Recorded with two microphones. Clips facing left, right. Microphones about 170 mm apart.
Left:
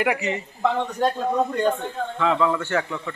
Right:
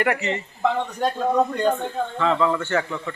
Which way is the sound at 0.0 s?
10° left (ahead or behind).